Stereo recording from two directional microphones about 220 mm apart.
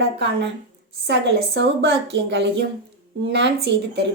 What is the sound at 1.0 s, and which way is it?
A woman's voice, 50° right (ahead or behind).